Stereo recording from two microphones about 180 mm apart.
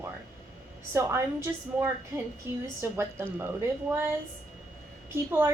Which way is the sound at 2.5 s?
15° right (ahead or behind).